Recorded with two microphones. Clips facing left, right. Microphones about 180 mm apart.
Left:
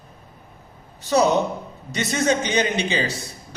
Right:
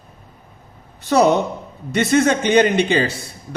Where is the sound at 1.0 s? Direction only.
60° right (ahead or behind).